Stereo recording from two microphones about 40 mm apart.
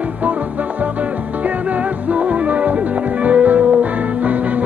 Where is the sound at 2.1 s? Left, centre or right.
Right.